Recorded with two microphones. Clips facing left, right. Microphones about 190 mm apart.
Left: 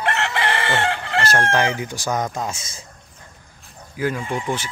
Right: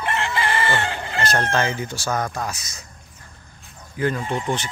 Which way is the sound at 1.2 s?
10° left (ahead or behind).